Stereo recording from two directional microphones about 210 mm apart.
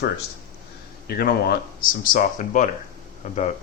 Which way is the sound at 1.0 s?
50° left (ahead or behind).